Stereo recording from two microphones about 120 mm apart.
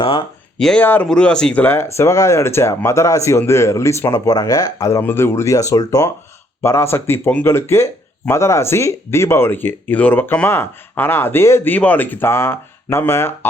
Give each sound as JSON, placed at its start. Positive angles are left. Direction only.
{"t": 0.0, "sound": "speech", "side_deg": 50}
{"t": 0.6, "sound": "speech", "side_deg": 5}
{"t": 1.6, "sound": "speech", "side_deg": 20}